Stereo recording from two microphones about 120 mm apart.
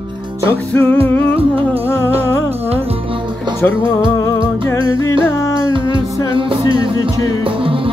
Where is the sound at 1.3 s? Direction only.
55° right (ahead or behind).